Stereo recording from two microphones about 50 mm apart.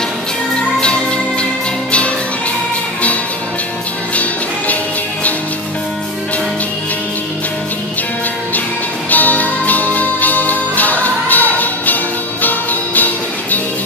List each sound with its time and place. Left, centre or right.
0.6 s music: centre
4.1 s music: left
9.1 s music: left